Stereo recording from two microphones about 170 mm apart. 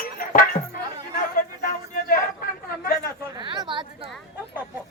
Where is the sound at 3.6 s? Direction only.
30° right (ahead or behind).